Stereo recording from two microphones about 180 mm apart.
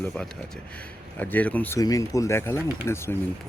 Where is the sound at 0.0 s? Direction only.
5° left (ahead or behind).